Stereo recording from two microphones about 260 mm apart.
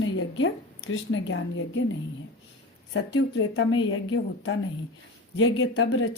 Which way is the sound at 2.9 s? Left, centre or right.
Left.